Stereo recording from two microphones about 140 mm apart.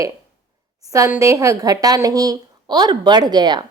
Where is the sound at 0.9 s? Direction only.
25° right (ahead or behind).